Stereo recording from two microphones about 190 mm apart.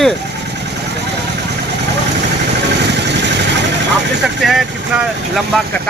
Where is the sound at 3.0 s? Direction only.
65° right (ahead or behind).